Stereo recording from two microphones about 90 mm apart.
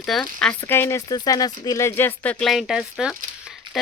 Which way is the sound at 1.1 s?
45° left (ahead or behind).